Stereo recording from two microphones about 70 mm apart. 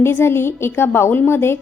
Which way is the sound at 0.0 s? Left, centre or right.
Left.